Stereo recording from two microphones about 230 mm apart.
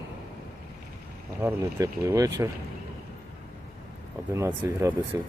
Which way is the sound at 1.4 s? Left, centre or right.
Centre.